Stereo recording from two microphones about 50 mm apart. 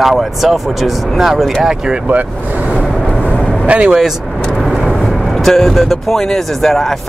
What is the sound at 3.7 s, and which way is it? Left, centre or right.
Speech, right.